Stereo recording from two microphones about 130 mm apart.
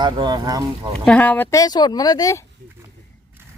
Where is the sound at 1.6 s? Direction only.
30° left (ahead or behind).